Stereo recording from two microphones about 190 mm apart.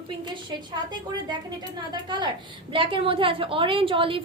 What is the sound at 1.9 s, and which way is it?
A woman's voice, 20° right (ahead or behind).